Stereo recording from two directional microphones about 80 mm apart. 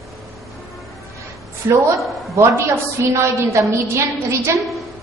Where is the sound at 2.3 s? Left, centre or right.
Right.